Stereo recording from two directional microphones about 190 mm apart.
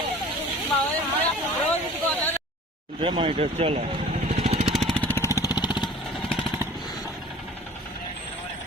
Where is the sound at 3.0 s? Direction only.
25° right (ahead or behind).